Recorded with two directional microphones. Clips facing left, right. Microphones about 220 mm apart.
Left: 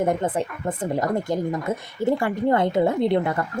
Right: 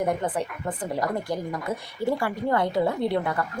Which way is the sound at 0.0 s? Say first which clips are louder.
Left 3 dB; 25° left (ahead or behind).